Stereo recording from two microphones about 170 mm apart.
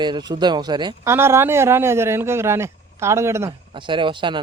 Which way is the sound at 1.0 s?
15° right (ahead or behind).